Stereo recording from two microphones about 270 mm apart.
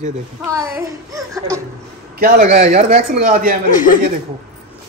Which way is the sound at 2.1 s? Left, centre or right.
Right.